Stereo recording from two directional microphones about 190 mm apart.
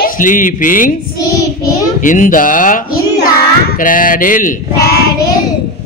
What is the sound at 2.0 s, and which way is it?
Speech, 45° left (ahead or behind).